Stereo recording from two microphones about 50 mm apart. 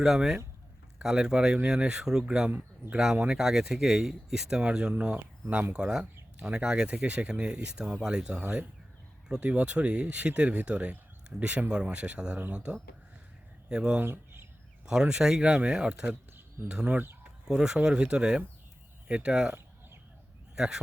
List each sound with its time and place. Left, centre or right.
0.0 s speech: centre
2.5 s speech: right
3.2 s speech: centre
5.7 s speech: centre
14.0 s a sound: right
14.8 s speech: centre
16.6 s speech: right
17.6 s speech: centre
20.6 s speech: centre